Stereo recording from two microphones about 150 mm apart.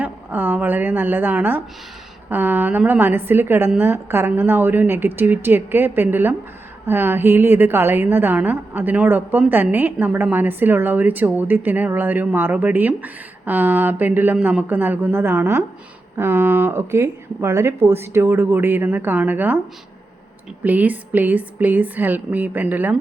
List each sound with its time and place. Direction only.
0.0 s a woman's voice: 10° right (ahead or behind)
20.7 s a woman's voice: 10° right (ahead or behind)